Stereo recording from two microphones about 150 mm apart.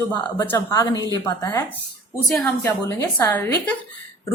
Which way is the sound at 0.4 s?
20° left (ahead or behind).